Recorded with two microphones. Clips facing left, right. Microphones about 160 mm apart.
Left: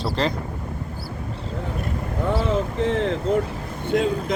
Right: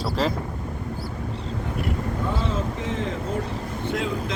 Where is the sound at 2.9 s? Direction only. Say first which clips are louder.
Left 8 dB; 60° left (ahead or behind).